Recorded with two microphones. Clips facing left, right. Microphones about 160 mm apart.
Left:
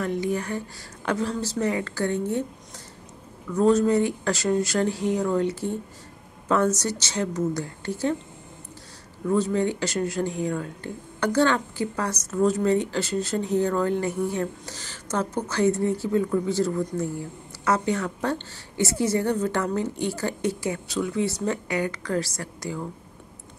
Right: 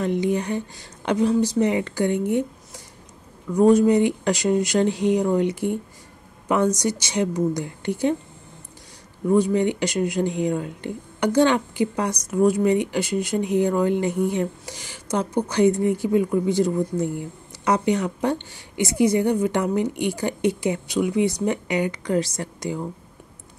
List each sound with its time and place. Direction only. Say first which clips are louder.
0.0 s speech: right 4 dB; 20° right (ahead or behind)
3.5 s speech: right 4 dB; 15° right (ahead or behind)
9.2 s speech: right 4 dB; 15° right (ahead or behind)